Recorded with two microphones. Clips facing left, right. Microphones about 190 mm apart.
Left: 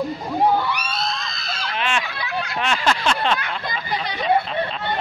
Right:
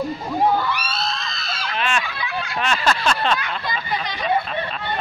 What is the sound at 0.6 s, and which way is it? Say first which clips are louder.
Screaming: even; 15° left (ahead or behind).